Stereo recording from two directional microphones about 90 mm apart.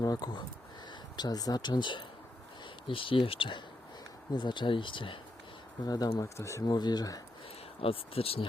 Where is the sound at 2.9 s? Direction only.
75° left (ahead or behind).